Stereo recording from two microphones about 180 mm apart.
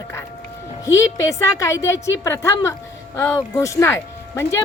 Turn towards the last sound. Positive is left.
turn(degrees=15)  # may be behind; listen again after turning